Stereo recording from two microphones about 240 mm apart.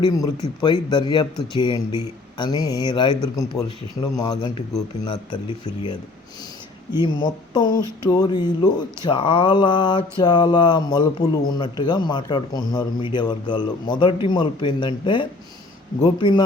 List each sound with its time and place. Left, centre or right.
0.0 s a man's voice: centre